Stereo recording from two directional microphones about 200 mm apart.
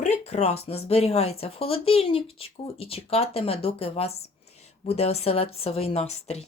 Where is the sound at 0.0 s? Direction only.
35° left (ahead or behind).